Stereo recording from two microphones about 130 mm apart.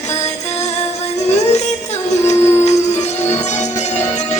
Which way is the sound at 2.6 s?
60° left (ahead or behind).